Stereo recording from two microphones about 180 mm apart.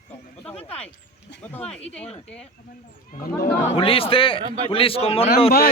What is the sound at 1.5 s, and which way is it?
Speech, 5° left (ahead or behind).